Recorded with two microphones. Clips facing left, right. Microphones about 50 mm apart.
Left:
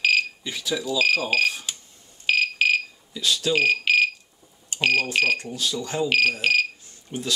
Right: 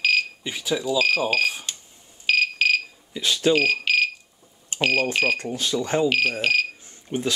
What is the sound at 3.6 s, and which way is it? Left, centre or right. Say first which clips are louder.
Smoke detector: left 1 dB; centre.